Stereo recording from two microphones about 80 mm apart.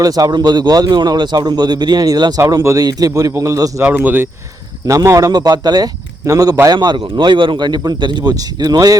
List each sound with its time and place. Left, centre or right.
0.0 s a man's voice: right
3.9 s speech: right
4.9 s speech: right
5.3 s a man's voice: right
6.7 s a man's voice: right